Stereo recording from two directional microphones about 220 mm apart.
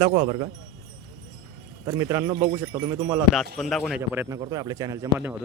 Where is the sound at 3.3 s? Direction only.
Centre (ahead or behind).